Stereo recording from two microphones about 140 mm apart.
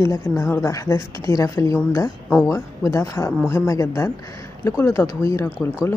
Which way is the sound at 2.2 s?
5° right (ahead or behind).